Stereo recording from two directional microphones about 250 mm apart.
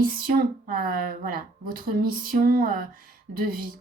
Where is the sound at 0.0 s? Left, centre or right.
Right.